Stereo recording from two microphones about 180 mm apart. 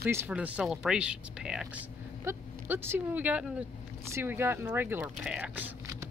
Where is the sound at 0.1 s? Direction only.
10° right (ahead or behind).